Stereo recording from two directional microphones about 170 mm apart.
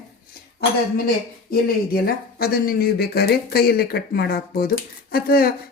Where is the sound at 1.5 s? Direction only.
60° left (ahead or behind).